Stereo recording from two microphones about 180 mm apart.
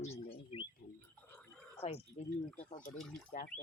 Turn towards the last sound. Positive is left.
turn(degrees=40)  # may be behind; listen again after turning